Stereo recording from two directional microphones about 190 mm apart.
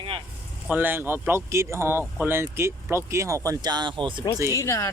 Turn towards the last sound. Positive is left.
turn(degrees=15)  # may be behind; listen again after turning